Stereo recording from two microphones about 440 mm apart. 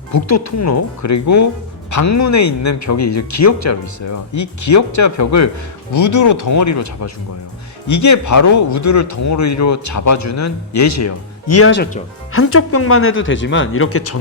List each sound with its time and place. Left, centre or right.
0.1 s speech: left